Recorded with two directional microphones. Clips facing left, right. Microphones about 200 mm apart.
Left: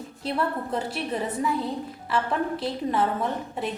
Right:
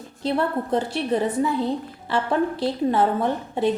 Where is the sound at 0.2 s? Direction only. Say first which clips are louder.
Right 5 dB; 30° right (ahead or behind).